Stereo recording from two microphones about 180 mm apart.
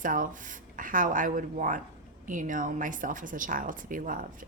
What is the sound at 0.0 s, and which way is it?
Speech, 50° right (ahead or behind).